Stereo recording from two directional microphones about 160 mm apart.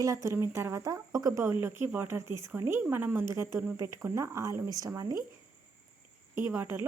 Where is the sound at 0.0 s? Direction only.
20° right (ahead or behind).